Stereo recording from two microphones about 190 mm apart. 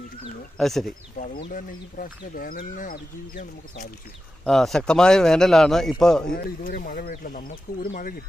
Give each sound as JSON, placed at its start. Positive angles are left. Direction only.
{"t": 0.5, "sound": "a man's voice", "side_deg": 0}
{"t": 1.1, "sound": "speech", "side_deg": 45}
{"t": 4.4, "sound": "a man's voice", "side_deg": 0}
{"t": 6.2, "sound": "speech", "side_deg": 50}